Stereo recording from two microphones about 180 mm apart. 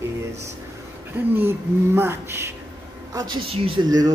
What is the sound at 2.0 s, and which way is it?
Speech, 15° right (ahead or behind).